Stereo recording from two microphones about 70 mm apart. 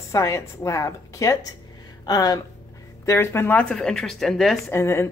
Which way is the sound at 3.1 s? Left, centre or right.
Left.